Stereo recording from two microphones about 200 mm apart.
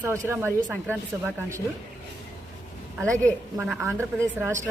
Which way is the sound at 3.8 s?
15° right (ahead or behind).